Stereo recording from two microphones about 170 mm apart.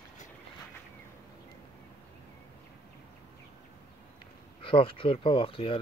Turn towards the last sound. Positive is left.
turn(degrees=30)  # may be behind; listen again after turning